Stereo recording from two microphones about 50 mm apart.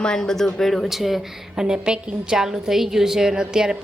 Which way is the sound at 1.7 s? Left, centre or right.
Right.